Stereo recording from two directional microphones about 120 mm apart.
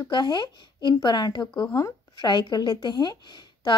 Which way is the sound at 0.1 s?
40° left (ahead or behind).